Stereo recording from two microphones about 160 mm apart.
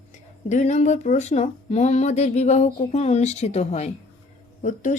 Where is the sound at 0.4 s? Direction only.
45° left (ahead or behind).